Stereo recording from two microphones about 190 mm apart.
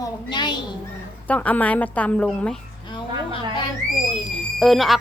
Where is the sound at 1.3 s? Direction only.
10° left (ahead or behind).